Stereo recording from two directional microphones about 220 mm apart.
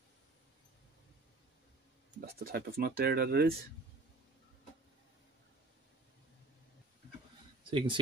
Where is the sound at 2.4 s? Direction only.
45° right (ahead or behind).